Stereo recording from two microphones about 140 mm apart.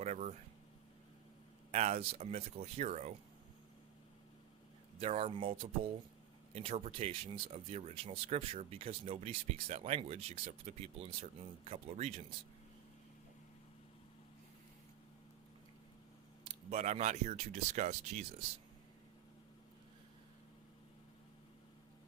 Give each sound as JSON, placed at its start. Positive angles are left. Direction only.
{"t": 0.0, "sound": "a sound", "side_deg": -55}
{"t": 1.7, "sound": "speech", "side_deg": -50}
{"t": 4.9, "sound": "speech", "side_deg": -45}
{"t": 16.6, "sound": "speech", "side_deg": -55}